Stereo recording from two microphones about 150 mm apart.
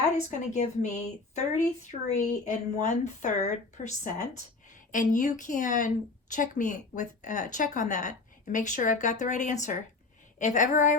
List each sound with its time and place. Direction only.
0.3 s a woman's voice: 50° left (ahead or behind)